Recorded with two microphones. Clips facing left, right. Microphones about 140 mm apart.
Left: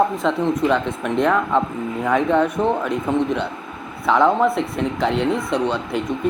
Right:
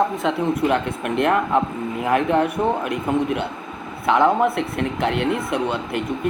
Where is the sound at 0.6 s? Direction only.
10° right (ahead or behind).